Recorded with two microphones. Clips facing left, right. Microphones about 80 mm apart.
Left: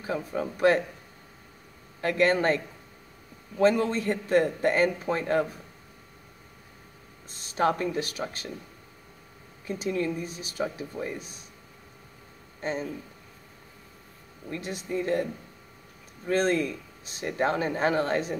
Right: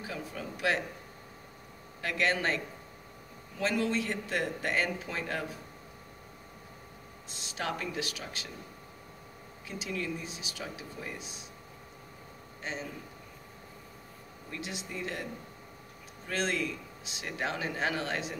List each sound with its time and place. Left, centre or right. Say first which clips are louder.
0.0 s speech: left 9 dB; left
2.0 s speech: left 7 dB; left
7.2 s speech: left 11 dB; left
9.7 s speech: left 8 dB; left
14.5 s speech: left 8 dB; left
16.3 s speech: left 8 dB; left